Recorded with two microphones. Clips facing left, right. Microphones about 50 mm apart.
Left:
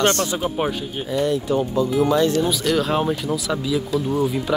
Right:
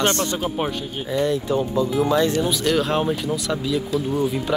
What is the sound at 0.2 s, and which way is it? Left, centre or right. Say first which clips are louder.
Speech: left 1 dB; centre.